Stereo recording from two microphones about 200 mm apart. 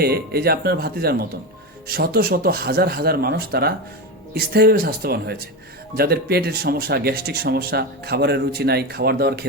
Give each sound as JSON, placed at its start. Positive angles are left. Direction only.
{"t": 0.0, "sound": "speech", "side_deg": -50}